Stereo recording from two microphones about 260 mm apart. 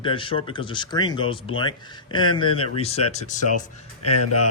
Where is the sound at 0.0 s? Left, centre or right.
Centre.